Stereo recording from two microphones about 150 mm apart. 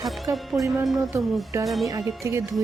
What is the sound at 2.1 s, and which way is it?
Speech, 20° right (ahead or behind).